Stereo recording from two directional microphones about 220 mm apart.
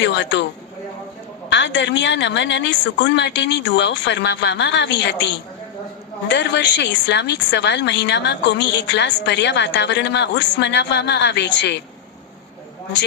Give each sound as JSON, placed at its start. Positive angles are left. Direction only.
{"t": 0.0, "sound": "a woman's voice", "side_deg": 55}
{"t": 1.5, "sound": "a woman's voice", "side_deg": 55}